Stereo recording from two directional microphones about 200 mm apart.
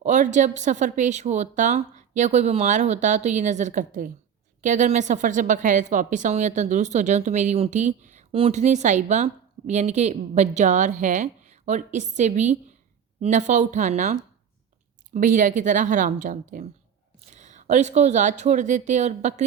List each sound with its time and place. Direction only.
0.0 s a woman's voice: 35° right (ahead or behind)